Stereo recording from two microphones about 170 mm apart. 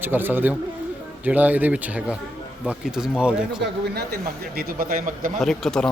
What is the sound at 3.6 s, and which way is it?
A man's voice, 70° right (ahead or behind).